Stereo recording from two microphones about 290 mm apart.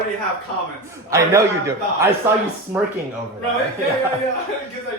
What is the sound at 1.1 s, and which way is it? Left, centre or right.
A man's voice, centre.